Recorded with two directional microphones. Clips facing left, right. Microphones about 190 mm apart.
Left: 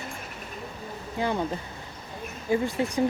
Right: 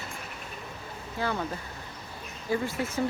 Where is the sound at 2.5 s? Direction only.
15° left (ahead or behind).